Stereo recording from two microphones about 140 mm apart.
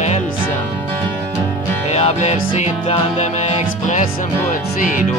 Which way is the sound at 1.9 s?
50° left (ahead or behind).